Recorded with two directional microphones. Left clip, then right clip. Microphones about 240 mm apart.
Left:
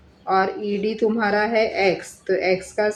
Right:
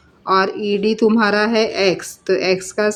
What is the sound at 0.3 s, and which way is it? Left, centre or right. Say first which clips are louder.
Speech: right 4 dB; right.